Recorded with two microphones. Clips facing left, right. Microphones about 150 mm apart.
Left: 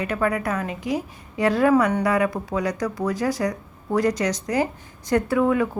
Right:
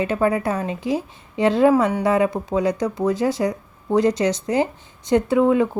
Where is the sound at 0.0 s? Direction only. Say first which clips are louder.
Right 4 dB; 25° right (ahead or behind).